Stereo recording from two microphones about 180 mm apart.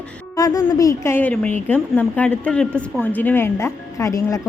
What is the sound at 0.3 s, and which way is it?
Speech, 20° left (ahead or behind).